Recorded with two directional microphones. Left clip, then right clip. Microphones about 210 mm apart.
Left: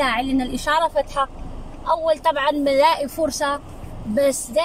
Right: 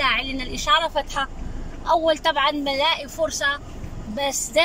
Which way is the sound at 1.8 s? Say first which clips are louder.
Even; 10° left (ahead or behind).